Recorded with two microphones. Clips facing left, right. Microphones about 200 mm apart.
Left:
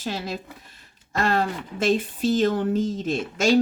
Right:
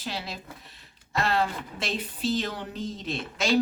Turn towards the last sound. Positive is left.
turn(degrees=45)  # may be behind; listen again after turning